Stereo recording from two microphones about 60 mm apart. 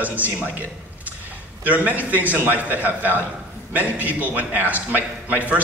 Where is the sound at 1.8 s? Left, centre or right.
Right.